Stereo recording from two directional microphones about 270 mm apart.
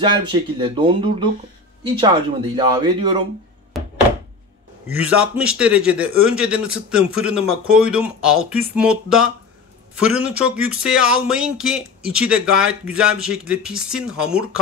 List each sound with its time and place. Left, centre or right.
0.0 s speech: centre
3.8 s thunk: centre
4.8 s speech: centre